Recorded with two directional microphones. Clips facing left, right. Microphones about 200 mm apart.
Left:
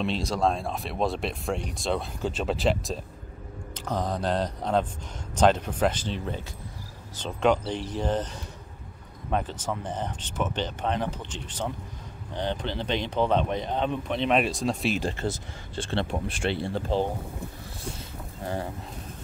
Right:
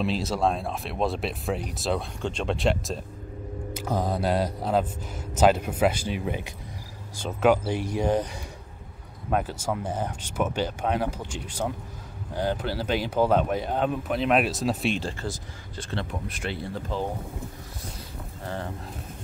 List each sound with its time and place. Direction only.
0.0 s speech: 5° right (ahead or behind)
15.0 s speech: 20° left (ahead or behind)
18.4 s speech: 15° left (ahead or behind)